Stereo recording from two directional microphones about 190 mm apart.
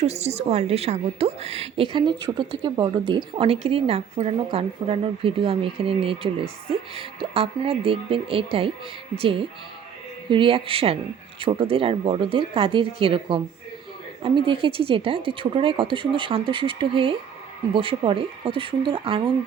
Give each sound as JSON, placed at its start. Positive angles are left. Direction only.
{"t": 0.0, "sound": "a woman's voice", "side_deg": -35}